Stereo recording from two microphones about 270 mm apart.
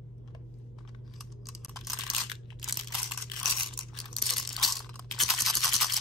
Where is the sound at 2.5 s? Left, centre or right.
Centre.